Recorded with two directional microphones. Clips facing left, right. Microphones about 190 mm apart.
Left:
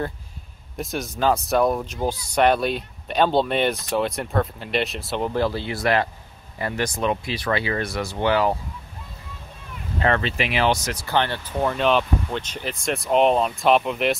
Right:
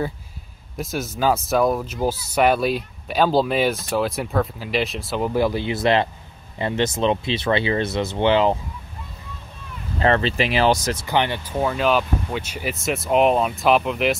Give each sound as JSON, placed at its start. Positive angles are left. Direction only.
{"t": 0.7, "sound": "speech", "side_deg": 0}
{"t": 9.9, "sound": "speech", "side_deg": -30}
{"t": 11.0, "sound": "speech", "side_deg": -15}
{"t": 11.6, "sound": "speech", "side_deg": -5}